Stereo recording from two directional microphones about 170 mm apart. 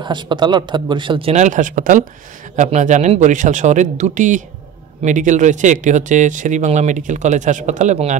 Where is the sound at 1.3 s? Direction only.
45° right (ahead or behind).